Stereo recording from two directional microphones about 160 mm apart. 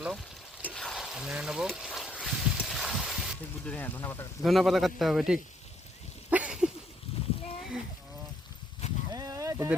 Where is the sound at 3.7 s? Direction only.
10° left (ahead or behind).